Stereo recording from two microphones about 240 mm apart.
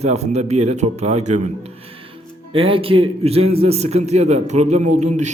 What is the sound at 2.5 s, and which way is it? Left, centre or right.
A man's voice, right.